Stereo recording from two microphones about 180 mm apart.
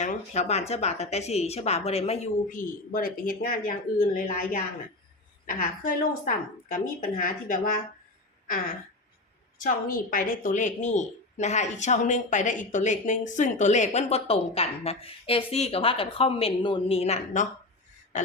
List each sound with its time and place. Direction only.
0.0 s a woman's voice: 40° left (ahead or behind)
9.6 s a woman's voice: 50° left (ahead or behind)